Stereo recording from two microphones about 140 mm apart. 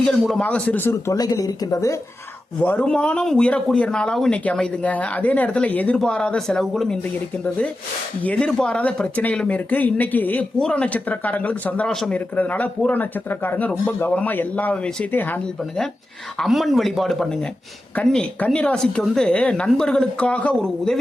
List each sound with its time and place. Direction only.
0.0 s speech: 5° left (ahead or behind); by 2.0 s 25° left (ahead or behind)
2.6 s speech: 10° left (ahead or behind)
8.2 s speech: 10° left (ahead or behind)
16.4 s speech: centre (ahead or behind)